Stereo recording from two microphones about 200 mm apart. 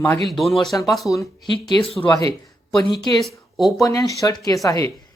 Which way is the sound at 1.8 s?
30° left (ahead or behind).